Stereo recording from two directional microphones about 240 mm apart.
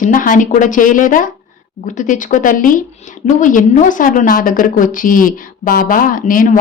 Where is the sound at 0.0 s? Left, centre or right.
Left.